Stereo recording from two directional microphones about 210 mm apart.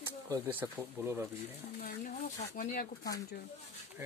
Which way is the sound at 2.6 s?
40° left (ahead or behind).